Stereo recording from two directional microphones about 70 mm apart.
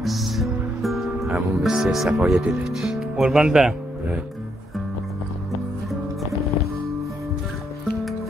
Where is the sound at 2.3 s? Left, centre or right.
Centre.